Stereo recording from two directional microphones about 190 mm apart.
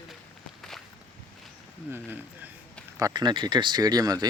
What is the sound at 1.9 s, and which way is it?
Speech, 10° right (ahead or behind).